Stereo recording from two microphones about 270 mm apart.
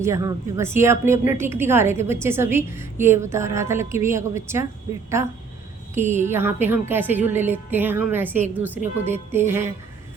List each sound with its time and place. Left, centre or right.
0.0 s a woman's voice: centre
6.0 s a woman's voice: right
6.2 s a woman's voice: centre